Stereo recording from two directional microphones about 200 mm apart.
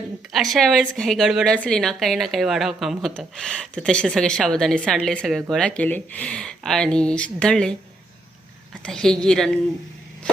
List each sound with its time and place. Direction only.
0.3 s a woman's voice: centre (ahead or behind)
8.8 s a woman's voice: 5° left (ahead or behind)